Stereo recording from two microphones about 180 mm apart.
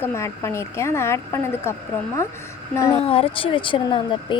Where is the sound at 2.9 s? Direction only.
35° left (ahead or behind).